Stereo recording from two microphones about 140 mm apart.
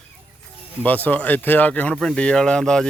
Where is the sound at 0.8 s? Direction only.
10° left (ahead or behind).